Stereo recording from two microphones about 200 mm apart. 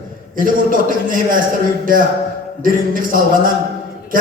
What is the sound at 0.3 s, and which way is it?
A man's voice, 45° right (ahead or behind).